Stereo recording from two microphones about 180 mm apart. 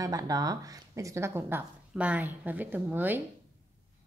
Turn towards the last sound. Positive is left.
turn(degrees=-10)  # may be behind; listen again after turning